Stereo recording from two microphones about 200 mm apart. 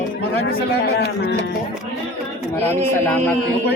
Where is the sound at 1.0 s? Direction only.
60° left (ahead or behind).